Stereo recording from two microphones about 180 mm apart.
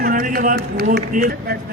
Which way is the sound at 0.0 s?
50° right (ahead or behind).